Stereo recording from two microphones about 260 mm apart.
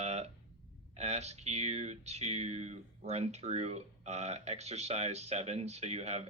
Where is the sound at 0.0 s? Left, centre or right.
Right.